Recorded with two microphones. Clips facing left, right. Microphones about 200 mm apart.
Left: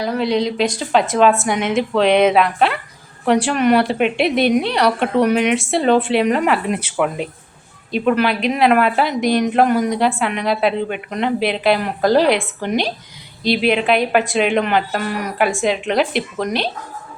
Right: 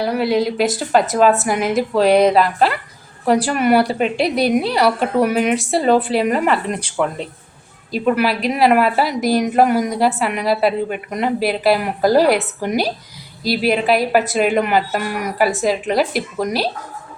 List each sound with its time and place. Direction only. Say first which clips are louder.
0.0 s a woman's voice: right 1 dB; 5° right (ahead or behind)
7.9 s a woman's voice: left 1 dB; 5° right (ahead or behind)